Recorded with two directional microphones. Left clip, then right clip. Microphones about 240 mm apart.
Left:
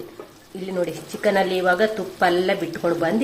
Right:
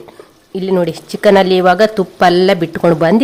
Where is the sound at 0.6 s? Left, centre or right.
Right.